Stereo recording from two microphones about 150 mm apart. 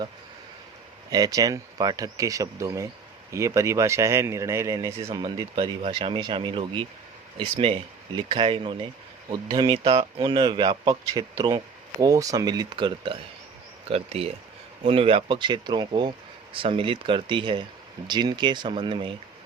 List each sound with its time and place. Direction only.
1.1 s speech: 25° right (ahead or behind)